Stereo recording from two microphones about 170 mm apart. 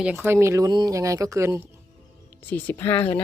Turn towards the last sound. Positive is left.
turn(degrees=10)  # may be behind; listen again after turning